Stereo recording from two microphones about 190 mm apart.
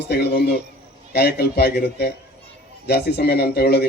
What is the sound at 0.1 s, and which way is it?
Speech, 60° left (ahead or behind).